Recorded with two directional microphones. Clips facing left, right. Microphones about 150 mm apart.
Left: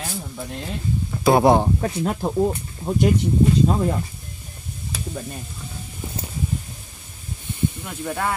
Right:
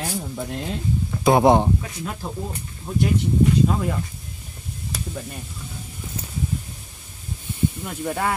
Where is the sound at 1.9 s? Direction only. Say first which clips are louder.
Left 8 dB; 35° left (ahead or behind).